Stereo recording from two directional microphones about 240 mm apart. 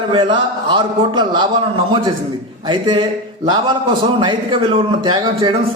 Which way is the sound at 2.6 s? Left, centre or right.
Centre.